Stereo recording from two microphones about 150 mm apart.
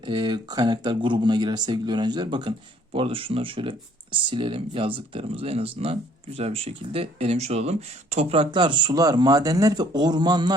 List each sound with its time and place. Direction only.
0.0 s speech: 30° right (ahead or behind)